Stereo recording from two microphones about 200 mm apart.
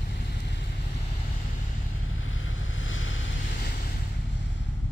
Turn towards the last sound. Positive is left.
turn(degrees=75)  # may be behind; listen again after turning